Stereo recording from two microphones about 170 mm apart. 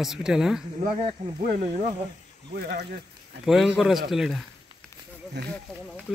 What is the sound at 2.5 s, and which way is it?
Speech, 60° right (ahead or behind).